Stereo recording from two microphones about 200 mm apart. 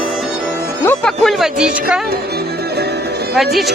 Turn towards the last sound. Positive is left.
turn(degrees=0)  # may be behind; listen again after turning